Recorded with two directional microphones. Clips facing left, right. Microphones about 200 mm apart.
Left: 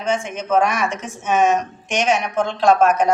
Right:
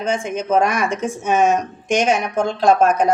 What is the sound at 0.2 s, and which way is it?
Speech, 35° right (ahead or behind).